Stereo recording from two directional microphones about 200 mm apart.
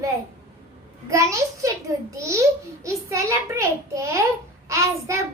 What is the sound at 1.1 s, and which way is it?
A child's voice, 15° right (ahead or behind).